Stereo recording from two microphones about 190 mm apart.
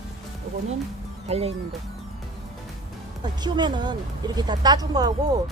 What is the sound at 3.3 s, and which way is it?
Speech, 25° right (ahead or behind).